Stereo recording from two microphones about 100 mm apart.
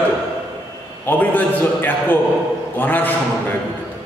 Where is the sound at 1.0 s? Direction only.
20° left (ahead or behind).